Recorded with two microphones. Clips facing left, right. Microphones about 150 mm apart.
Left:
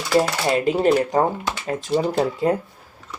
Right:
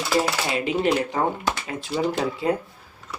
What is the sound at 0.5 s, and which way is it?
Speech, 45° left (ahead or behind).